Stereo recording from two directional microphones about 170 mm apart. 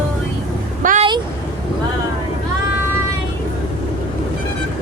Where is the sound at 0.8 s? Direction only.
50° right (ahead or behind).